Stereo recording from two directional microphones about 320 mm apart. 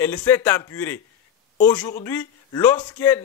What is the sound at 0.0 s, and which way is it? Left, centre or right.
A man's voice, centre.